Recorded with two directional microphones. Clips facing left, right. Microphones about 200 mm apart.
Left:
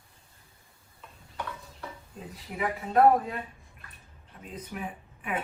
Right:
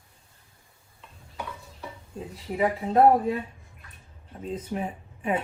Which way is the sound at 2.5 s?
25° right (ahead or behind).